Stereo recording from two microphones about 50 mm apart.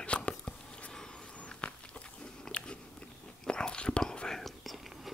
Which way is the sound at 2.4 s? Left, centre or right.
Left.